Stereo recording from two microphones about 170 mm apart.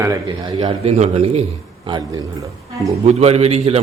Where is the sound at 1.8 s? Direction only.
25° right (ahead or behind).